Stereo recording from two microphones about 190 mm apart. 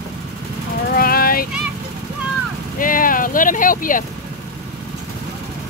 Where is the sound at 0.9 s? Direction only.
50° left (ahead or behind).